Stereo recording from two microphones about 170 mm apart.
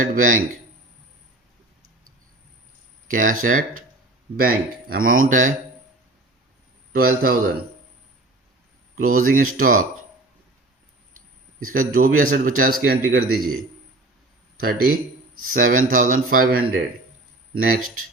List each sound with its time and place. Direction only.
0.0 s speech: 50° right (ahead or behind)
3.1 s a man's voice: 50° right (ahead or behind)
7.0 s a man's voice: 60° right (ahead or behind)
9.0 s a man's voice: 55° right (ahead or behind)
11.7 s a man's voice: 55° right (ahead or behind)
14.6 s a man's voice: 60° right (ahead or behind)